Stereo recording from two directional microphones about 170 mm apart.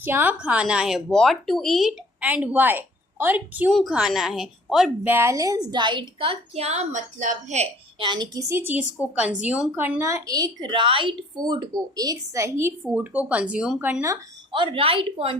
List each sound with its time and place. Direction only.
0.0 s a woman's voice: 10° right (ahead or behind)
5.1 s a woman's voice: 15° right (ahead or behind); by 8.0 s 40° right (ahead or behind)
8.0 s speech: 25° right (ahead or behind); by 14.0 s 5° right (ahead or behind)
14.5 s a woman's voice: 30° right (ahead or behind)